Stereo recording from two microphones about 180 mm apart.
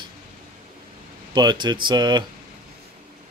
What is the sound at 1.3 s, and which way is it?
Speech, 25° right (ahead or behind).